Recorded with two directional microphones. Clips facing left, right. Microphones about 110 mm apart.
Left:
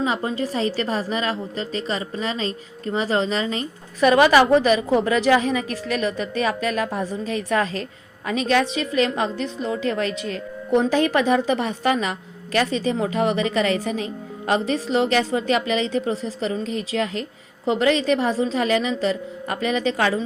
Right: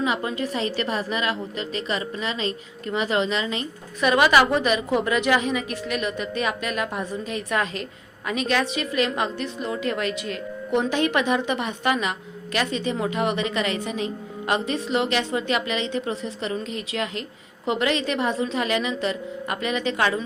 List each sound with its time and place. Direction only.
0.0 s a woman's voice: 35° left (ahead or behind)